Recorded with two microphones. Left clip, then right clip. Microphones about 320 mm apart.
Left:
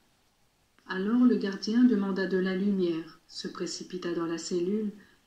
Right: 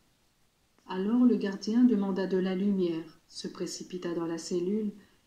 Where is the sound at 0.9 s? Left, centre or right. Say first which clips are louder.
Left 1 dB; centre.